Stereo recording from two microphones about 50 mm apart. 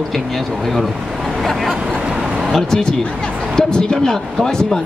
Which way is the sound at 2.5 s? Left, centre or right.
Centre.